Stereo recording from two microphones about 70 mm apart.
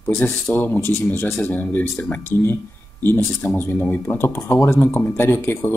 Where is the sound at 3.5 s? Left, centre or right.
Left.